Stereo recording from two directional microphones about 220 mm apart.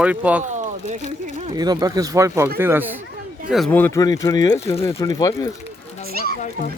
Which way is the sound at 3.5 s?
5° left (ahead or behind).